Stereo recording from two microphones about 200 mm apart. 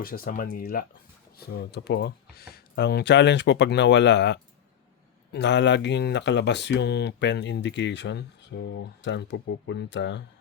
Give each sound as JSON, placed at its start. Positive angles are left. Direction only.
{"t": 0.0, "sound": "speech", "side_deg": 50}